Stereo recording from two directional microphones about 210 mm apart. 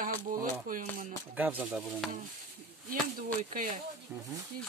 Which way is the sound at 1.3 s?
5° right (ahead or behind).